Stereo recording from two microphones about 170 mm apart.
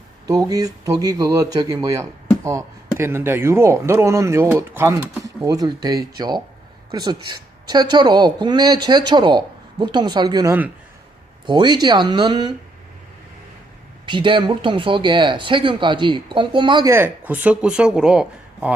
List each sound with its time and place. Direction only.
0.3 s speech: 20° right (ahead or behind)
14.0 s speech: 30° right (ahead or behind)
16.9 s speech: 10° right (ahead or behind)